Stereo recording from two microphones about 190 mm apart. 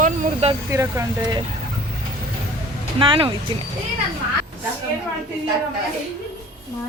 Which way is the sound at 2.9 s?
25° right (ahead or behind).